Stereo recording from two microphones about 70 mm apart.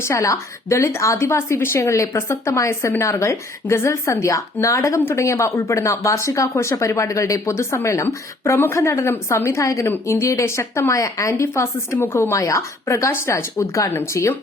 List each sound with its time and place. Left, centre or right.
0.0 s a woman's voice: left
4.9 s a woman's voice: left
5.2 s a woman's voice: left
9.8 s a woman's voice: left